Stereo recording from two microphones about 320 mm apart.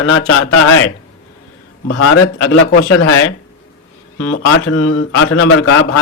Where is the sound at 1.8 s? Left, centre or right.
Left.